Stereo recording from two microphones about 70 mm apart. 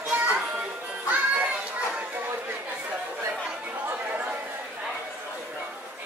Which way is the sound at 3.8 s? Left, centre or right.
Right.